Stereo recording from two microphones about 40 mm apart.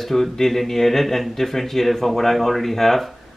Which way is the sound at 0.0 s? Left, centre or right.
Centre.